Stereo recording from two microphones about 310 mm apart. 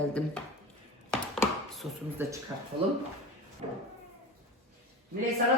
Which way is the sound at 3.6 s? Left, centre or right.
Centre.